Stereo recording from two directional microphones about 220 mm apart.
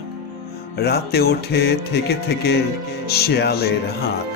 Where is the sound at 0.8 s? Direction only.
45° left (ahead or behind).